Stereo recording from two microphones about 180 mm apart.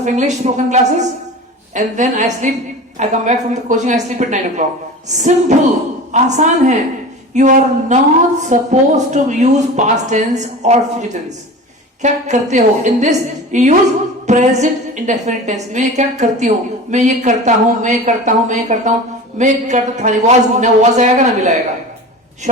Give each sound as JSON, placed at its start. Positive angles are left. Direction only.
{"t": 0.0, "sound": "a woman's voice", "side_deg": -40}